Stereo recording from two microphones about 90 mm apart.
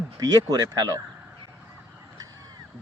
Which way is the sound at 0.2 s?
45° right (ahead or behind).